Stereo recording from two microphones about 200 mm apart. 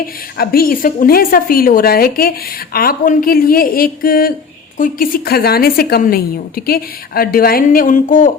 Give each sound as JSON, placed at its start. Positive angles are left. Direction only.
{"t": 0.3, "sound": "a woman's voice", "side_deg": 50}